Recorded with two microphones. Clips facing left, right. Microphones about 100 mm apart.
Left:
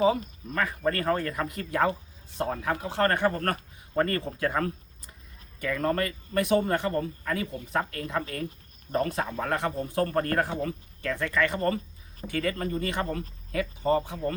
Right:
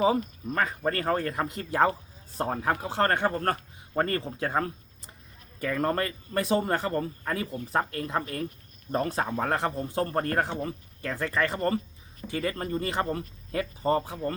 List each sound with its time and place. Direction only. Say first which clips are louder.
0.0 s a man's voice: even; 30° right (ahead or behind)